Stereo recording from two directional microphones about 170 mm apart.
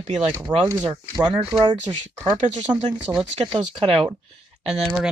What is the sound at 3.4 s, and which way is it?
Speech, 30° right (ahead or behind).